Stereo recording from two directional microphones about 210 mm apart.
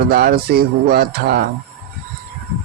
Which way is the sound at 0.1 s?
50° right (ahead or behind).